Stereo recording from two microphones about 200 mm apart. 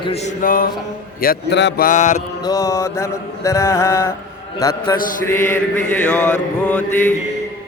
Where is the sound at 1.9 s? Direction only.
35° left (ahead or behind).